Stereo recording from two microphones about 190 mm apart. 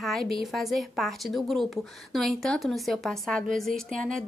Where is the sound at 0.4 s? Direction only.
Centre (ahead or behind).